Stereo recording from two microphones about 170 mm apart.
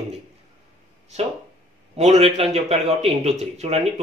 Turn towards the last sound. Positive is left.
turn(degrees=-40)  # may be behind; listen again after turning